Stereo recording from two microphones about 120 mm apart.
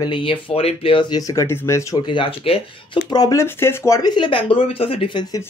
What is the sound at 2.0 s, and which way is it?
Speech, 45° left (ahead or behind).